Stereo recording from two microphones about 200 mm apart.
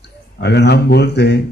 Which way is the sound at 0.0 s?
60° left (ahead or behind).